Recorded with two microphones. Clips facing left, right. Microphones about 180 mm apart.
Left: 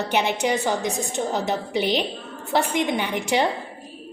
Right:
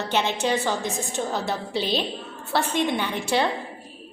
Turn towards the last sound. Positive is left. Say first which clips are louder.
# left 2 dB
turn(degrees=15)  # may be behind; listen again after turning